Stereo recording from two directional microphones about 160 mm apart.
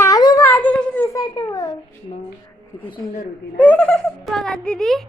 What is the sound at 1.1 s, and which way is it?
Speech, 25° left (ahead or behind).